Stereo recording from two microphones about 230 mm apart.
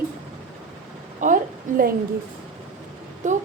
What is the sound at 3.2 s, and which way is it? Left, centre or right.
Speech, right.